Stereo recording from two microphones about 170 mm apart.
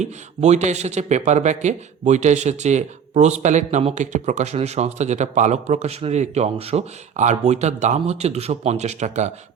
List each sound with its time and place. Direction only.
0.0 s speech: 40° right (ahead or behind)